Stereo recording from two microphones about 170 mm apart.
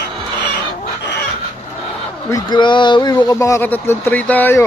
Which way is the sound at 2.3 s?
25° left (ahead or behind).